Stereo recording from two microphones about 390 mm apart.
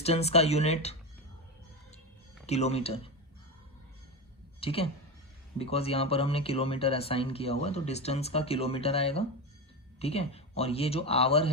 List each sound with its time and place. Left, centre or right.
0.0 s speech: centre
2.5 s speech: centre
4.6 s speech: centre